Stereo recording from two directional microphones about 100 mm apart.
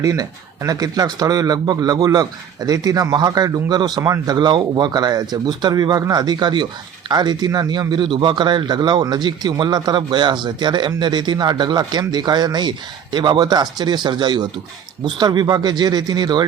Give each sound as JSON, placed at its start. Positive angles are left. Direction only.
{"t": 0.0, "sound": "a man's voice", "side_deg": -35}